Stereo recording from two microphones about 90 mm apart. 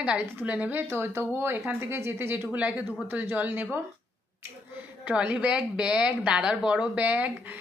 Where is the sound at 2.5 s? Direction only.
15° right (ahead or behind).